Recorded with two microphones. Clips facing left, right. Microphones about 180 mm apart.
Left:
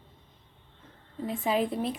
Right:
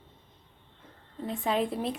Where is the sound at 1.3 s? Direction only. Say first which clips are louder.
Left 1 dB; centre (ahead or behind).